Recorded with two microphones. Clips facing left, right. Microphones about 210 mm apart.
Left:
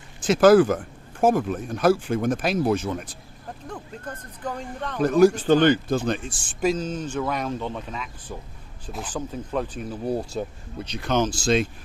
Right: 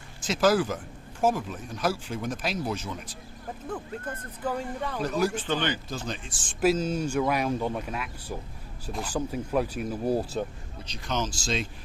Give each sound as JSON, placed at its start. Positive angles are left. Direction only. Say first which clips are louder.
{"t": 0.2, "sound": "speech", "louder": "left 8 dB", "side_deg": 55}
{"t": 3.7, "sound": "speech", "louder": "right 2 dB", "side_deg": -5}
{"t": 5.0, "sound": "speech", "louder": "left 11 dB", "side_deg": 45}
{"t": 6.5, "sound": "speech", "louder": "even", "side_deg": -5}
{"t": 10.8, "sound": "speech", "louder": "left 8 dB", "side_deg": 60}